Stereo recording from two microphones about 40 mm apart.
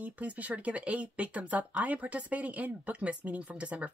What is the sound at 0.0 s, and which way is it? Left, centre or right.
Speech, right.